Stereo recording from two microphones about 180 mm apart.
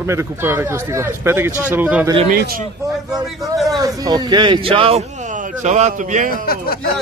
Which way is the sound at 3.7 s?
20° right (ahead or behind).